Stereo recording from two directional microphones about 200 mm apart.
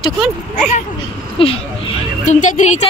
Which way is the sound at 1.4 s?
30° left (ahead or behind).